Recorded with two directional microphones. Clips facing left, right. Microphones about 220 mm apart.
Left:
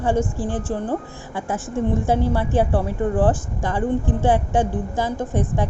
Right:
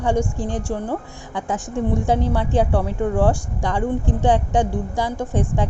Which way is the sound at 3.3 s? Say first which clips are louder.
Right 1 dB; 15° right (ahead or behind).